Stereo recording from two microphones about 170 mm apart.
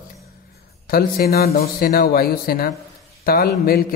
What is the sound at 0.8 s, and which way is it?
A man's voice, 60° left (ahead or behind).